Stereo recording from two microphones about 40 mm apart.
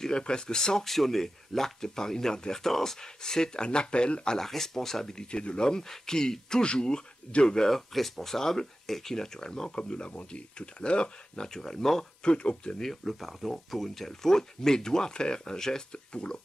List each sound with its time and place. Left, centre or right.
0.0 s speech: left
4.4 s speech: centre
5.1 s speech: left
7.7 s speech: centre; by 11.4 s left
11.4 s speech: centre
12.2 s speech: left
12.8 s speech: centre; by 16.3 s left